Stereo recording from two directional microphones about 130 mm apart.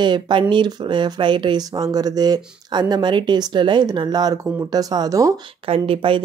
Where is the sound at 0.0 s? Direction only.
35° right (ahead or behind).